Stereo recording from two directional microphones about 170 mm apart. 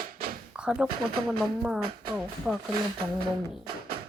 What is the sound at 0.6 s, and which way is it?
A woman's voice, 5° right (ahead or behind).